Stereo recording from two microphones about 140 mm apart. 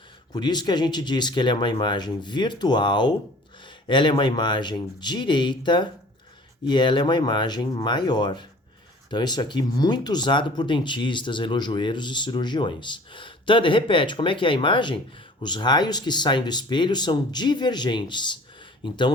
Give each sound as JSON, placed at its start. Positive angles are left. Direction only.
{"t": 0.3, "sound": "speech", "side_deg": 30}